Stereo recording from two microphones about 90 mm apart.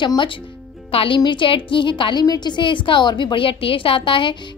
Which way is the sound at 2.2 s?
50° left (ahead or behind).